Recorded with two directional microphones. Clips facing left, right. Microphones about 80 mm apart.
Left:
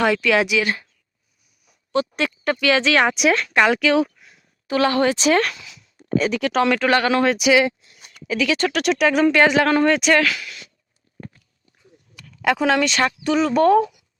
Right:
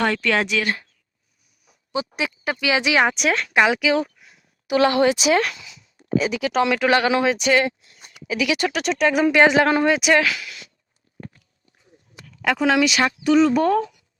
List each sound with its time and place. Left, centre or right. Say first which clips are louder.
0.0 s speech: left 3 dB; centre
1.6 s a sound: left 5 dB; centre
2.1 s speech: left 3 dB; centre
4.6 s speech: right 1 dB; centre
5.2 s speech: left 1 dB; centre
6.8 s speech: even; centre
7.3 s speech: left 2 dB; centre
8.1 s speech: left 1 dB; centre
8.8 s speech: left 2 dB; centre
9.4 s speech: right 3 dB; right
11.2 s walk: even; centre
12.4 s speech: even; centre